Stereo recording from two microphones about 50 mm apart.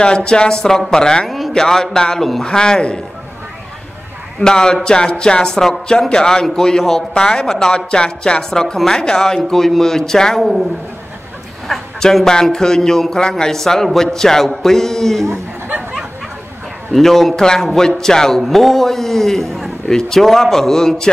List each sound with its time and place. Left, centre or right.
0.0 s a man's voice: centre
4.4 s a man's voice: centre
11.7 s a man's voice: centre
16.9 s a man's voice: centre